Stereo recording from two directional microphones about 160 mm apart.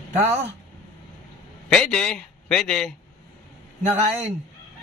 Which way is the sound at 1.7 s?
5° left (ahead or behind).